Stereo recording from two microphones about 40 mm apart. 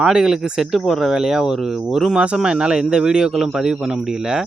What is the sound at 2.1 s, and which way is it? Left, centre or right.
A man's voice, right.